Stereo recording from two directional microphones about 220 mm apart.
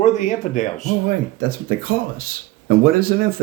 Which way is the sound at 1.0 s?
40° right (ahead or behind).